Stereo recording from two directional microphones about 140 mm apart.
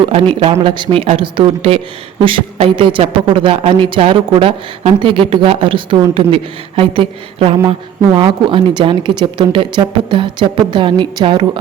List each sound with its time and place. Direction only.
0.2 s speech: 40° right (ahead or behind)